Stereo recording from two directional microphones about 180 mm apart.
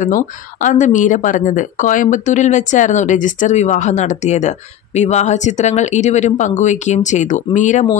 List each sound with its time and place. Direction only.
0.0 s speech: 45° left (ahead or behind)